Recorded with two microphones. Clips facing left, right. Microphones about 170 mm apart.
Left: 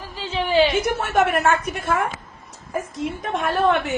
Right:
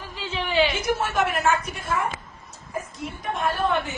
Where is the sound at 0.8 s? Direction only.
60° left (ahead or behind).